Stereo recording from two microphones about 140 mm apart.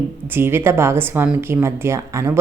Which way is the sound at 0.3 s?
15° right (ahead or behind).